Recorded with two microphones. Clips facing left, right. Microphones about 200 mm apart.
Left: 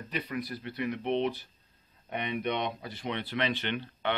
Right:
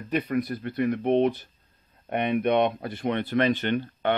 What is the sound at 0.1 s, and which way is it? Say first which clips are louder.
A man's voice: right 9 dB; 50° right (ahead or behind).